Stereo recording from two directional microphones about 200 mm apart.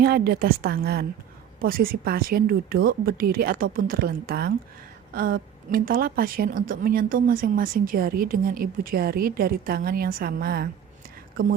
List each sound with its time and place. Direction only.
0.0 s a woman's voice: 50° right (ahead or behind)